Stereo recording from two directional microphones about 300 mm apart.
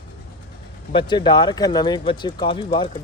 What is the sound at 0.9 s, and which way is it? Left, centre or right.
Speech, centre.